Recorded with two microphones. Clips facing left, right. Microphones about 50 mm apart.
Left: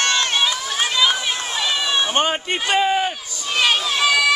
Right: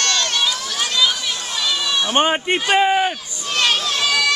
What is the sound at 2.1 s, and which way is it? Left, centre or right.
Speech, centre.